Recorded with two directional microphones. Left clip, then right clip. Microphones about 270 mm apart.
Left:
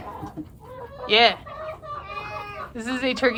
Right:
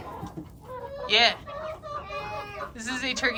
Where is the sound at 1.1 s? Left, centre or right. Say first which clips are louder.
Left 4 dB; centre.